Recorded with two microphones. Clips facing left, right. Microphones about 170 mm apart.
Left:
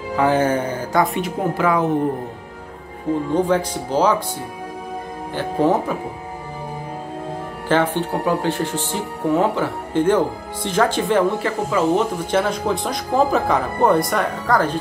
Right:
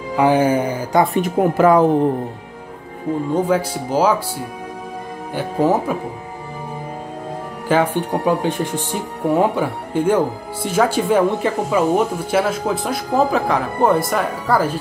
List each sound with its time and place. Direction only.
0.1 s speech: 15° right (ahead or behind)
1.1 s speech: 40° right (ahead or behind)
3.3 s speech: 10° right (ahead or behind)
5.3 s speech: 10° right (ahead or behind)
7.6 s speech: 10° right (ahead or behind)